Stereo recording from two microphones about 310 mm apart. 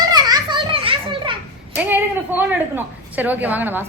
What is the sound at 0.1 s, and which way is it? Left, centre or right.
Children playing, centre.